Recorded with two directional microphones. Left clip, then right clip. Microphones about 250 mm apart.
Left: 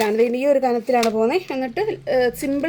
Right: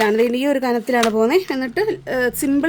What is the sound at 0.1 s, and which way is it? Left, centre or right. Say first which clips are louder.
Speech: even; right.